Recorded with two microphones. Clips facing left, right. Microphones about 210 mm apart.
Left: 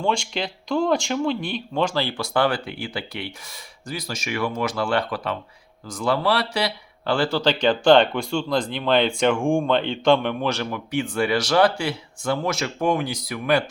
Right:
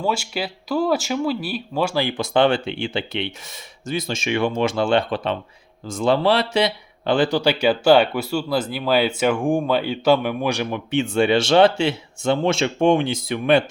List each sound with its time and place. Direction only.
0.0 s speech: 5° right (ahead or behind); by 13.7 s 25° right (ahead or behind)